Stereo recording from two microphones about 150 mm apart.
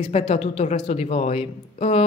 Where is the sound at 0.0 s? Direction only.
40° left (ahead or behind).